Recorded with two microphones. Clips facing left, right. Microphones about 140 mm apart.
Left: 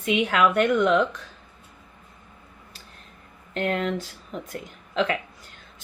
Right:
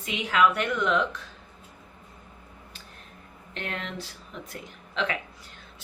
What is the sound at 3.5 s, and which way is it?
Speech, 40° left (ahead or behind).